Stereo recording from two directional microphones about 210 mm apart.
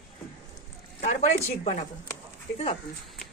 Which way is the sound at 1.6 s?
30° left (ahead or behind).